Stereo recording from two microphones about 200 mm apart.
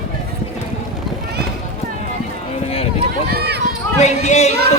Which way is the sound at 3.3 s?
55° right (ahead or behind).